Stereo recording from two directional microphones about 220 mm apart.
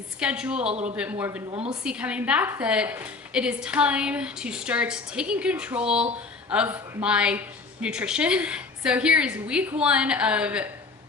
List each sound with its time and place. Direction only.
0.2 s a woman's voice: 5° right (ahead or behind)
0.7 s a man's voice: 30° right (ahead or behind)
1.7 s a woman's voice: 5° right (ahead or behind)